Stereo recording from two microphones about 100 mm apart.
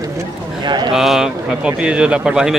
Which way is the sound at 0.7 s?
50° right (ahead or behind).